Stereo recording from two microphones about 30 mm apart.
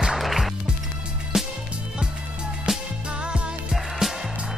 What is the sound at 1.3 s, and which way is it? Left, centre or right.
Music, centre.